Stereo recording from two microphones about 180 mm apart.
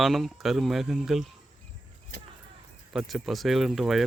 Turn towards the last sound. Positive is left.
turn(degrees=0)  # may be behind; listen again after turning